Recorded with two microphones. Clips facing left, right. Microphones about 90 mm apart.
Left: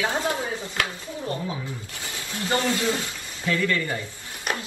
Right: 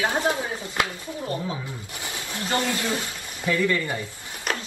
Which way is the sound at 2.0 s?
20° right (ahead or behind).